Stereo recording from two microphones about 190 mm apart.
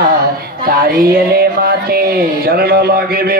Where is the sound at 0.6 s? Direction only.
55° right (ahead or behind).